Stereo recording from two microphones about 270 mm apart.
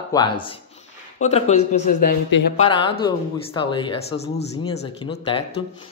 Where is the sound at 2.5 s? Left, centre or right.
Centre.